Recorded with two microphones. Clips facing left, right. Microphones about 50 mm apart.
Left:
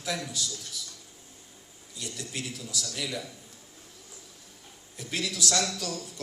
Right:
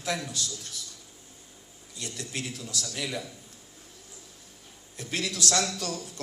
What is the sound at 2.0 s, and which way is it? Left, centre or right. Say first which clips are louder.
Speech: right 1 dB; right.